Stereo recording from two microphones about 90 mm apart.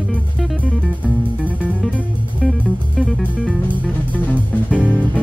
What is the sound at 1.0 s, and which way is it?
Music, 15° right (ahead or behind).